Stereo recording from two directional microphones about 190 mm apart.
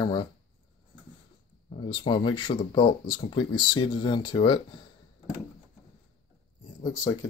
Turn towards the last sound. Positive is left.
turn(degrees=15)  # may be behind; listen again after turning